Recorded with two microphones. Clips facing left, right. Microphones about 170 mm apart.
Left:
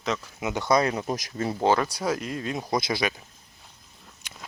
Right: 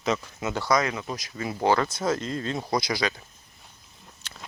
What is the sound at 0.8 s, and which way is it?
Speech, 35° left (ahead or behind).